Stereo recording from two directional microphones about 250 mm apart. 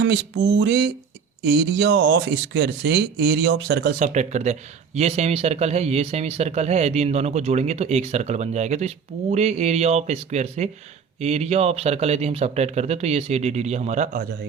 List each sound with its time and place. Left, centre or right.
0.0 s speech: right